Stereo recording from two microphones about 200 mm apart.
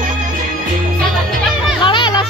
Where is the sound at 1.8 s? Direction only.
25° left (ahead or behind).